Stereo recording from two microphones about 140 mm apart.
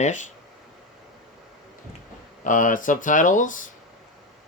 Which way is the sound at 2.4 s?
65° left (ahead or behind).